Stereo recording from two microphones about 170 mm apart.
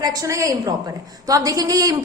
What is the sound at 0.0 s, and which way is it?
A woman's voice, 20° right (ahead or behind).